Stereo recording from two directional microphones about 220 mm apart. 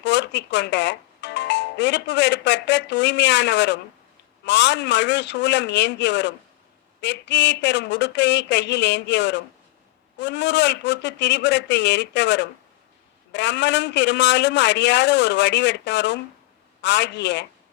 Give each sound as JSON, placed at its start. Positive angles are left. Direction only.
{"t": 0.0, "sound": "a woman's voice", "side_deg": 55}